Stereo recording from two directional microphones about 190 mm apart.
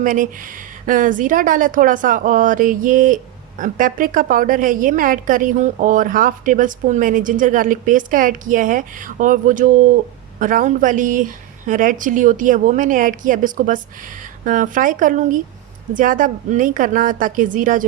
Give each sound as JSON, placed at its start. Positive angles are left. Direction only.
{"t": 0.0, "sound": "a woman's voice", "side_deg": -45}